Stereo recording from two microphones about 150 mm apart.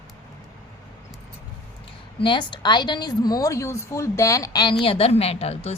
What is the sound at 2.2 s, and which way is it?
A woman's voice, 30° left (ahead or behind).